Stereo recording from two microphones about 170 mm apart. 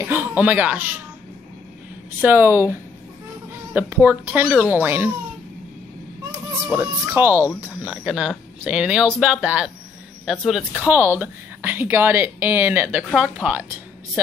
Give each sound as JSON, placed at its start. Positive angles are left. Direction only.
{"t": 0.0, "sound": "speech", "side_deg": -10}
{"t": 2.2, "sound": "speech", "side_deg": -10}
{"t": 6.8, "sound": "a woman's voice", "side_deg": -10}